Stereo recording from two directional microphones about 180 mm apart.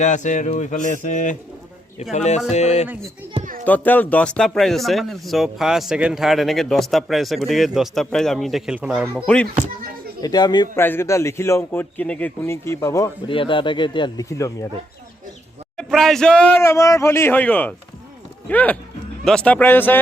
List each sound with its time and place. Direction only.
0.0 s speech: 45° left (ahead or behind)
3.4 s children playing: 45° right (ahead or behind)
3.7 s speech: 10° left (ahead or behind)
10.2 s speech: 20° left (ahead or behind)
13.2 s speech: 30° left (ahead or behind)
15.8 s speech: centre (ahead or behind)